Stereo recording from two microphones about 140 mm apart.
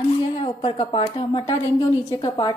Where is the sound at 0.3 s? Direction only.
40° left (ahead or behind).